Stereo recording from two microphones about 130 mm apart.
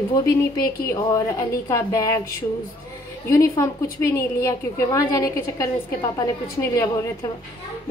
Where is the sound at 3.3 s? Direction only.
25° left (ahead or behind).